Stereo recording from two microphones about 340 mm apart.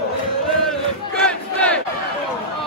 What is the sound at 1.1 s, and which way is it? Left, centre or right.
Battle cry, centre.